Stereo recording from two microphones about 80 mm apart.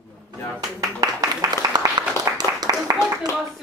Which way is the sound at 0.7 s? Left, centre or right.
Right.